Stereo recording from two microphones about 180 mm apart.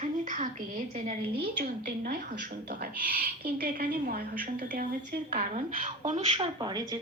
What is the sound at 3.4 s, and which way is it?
Speech, 55° right (ahead or behind).